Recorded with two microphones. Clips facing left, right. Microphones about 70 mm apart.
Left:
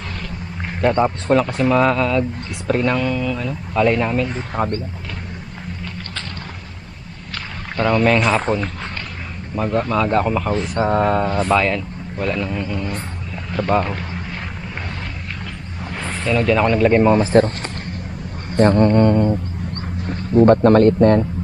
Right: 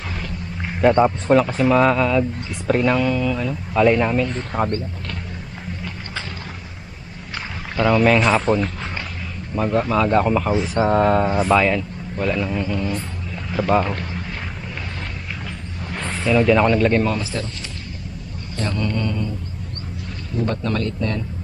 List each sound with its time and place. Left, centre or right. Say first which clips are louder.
0.2 s speech: even; centre
7.8 s speech: even; centre
15.9 s speech: right 1 dB; centre
17.3 s speech: left 14 dB; left
18.5 s a man's voice: left 11 dB; left